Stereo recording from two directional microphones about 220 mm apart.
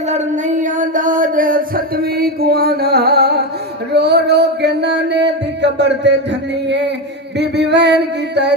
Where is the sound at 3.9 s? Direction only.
50° right (ahead or behind).